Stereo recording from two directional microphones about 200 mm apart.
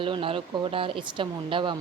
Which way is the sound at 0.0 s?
25° right (ahead or behind).